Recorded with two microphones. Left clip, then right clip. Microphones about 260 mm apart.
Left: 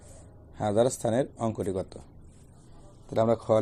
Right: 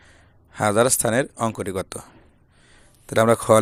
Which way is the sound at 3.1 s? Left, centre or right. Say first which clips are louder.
Right 8 dB; right.